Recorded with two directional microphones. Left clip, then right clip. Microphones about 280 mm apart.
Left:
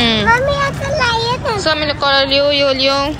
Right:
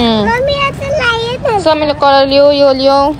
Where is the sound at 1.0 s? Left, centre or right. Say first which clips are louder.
Right 2 dB; right.